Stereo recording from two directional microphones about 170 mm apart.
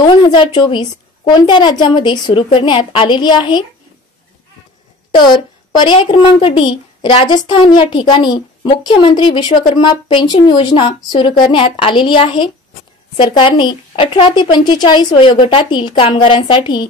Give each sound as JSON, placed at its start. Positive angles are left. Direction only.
{"t": 0.0, "sound": "a woman's voice", "side_deg": 30}
{"t": 5.2, "sound": "a woman's voice", "side_deg": 25}